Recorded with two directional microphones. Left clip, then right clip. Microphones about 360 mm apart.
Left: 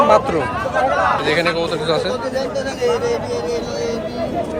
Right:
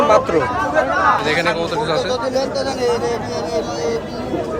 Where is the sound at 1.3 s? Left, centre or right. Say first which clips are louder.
Even; centre.